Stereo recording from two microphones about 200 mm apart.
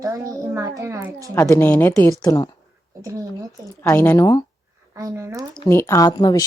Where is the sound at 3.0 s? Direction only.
15° right (ahead or behind).